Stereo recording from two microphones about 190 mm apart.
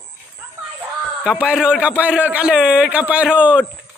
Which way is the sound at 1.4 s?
5° right (ahead or behind).